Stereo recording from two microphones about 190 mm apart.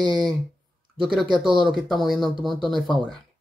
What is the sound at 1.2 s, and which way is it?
Speech, 25° right (ahead or behind).